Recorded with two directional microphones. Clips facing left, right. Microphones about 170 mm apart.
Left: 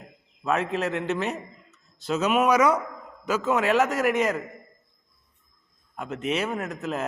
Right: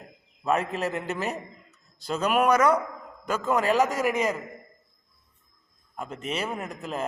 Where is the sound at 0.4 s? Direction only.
Centre (ahead or behind).